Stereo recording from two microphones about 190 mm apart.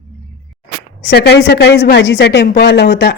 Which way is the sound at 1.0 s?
60° left (ahead or behind).